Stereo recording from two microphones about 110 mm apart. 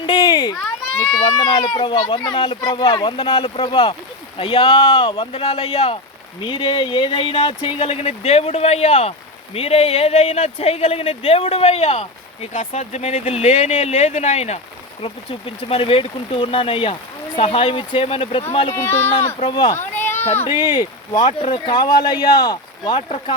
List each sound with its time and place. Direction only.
0.0 s children playing: 40° left (ahead or behind)
1.2 s speech: 40° left (ahead or behind); by 6.0 s 70° left (ahead or behind)
6.4 s speech: 50° left (ahead or behind)
7.8 s speech: 70° left (ahead or behind)
9.6 s speech: 65° left (ahead or behind); by 14.6 s 85° left
15.0 s speech: 55° left (ahead or behind)
18.7 s speech: 20° left (ahead or behind)
19.5 s speech: 45° left (ahead or behind)
19.8 s a sound: 20° left (ahead or behind)
20.5 s speech: 45° left (ahead or behind)
21.3 s speech: 55° left (ahead or behind); by 23.0 s 40° left (ahead or behind)
23.0 s speech: 60° left (ahead or behind)